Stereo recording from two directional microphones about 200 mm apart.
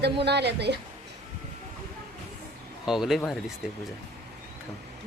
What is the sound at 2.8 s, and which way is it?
Speech, centre (ahead or behind).